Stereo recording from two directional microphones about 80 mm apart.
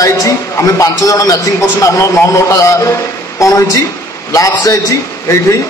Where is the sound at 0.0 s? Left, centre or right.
Left.